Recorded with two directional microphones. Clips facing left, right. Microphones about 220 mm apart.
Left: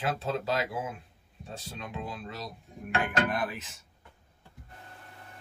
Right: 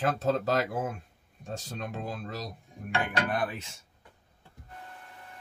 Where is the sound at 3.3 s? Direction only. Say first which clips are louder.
Right 2 dB; 35° right (ahead or behind).